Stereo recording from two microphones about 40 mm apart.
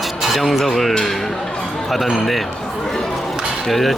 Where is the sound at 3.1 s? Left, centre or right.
Centre.